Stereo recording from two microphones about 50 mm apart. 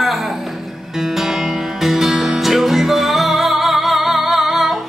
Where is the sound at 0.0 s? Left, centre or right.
Centre.